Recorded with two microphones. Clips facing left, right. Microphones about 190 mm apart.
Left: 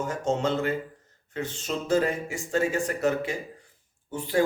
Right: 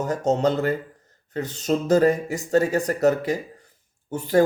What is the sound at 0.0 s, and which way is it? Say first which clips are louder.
Speech: right 5 dB; 40° right (ahead or behind).